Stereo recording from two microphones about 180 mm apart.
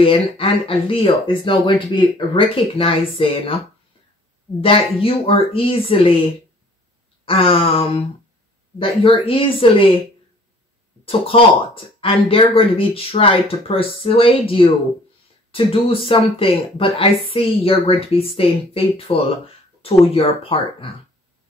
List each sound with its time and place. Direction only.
0.0 s speech: 30° left (ahead or behind)
4.6 s a woman's voice: 30° left (ahead or behind)
7.2 s a woman's voice: 30° left (ahead or behind)
9.2 s speech: 30° left (ahead or behind)
11.1 s a woman's voice: 30° left (ahead or behind)